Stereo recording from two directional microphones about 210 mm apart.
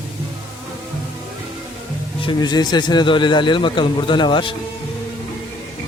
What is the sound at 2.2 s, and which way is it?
Speech, 20° left (ahead or behind).